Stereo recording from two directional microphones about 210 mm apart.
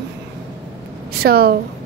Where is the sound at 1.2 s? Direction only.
45° right (ahead or behind).